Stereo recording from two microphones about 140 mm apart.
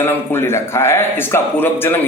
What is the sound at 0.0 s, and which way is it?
A man's voice, 15° left (ahead or behind).